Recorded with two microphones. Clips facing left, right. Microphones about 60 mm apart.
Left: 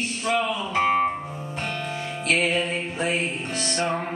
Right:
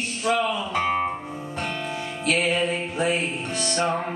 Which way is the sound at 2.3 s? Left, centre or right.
Centre.